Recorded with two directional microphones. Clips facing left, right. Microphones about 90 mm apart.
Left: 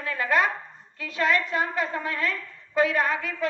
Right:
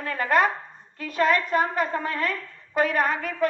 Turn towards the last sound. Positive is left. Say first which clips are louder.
# right 1 dB
turn(degrees=-45)  # may be behind; listen again after turning